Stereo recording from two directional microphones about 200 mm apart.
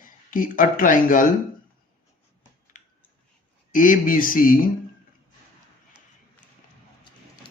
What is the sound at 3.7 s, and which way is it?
Speech, 40° left (ahead or behind).